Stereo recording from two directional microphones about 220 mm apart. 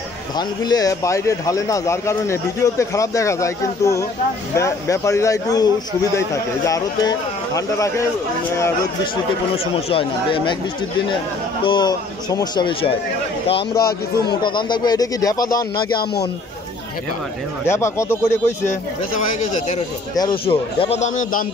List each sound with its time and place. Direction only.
0.4 s speech: 15° left (ahead or behind)
9.8 s speech: 25° left (ahead or behind)
11.6 s speech: 20° left (ahead or behind)
17.6 s speech: 10° left (ahead or behind)
20.2 s speech: 25° left (ahead or behind)